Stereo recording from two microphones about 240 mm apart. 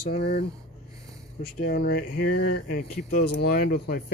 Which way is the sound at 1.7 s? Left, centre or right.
Left.